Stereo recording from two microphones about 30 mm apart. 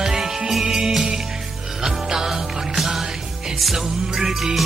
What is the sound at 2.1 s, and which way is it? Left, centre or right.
Music, centre.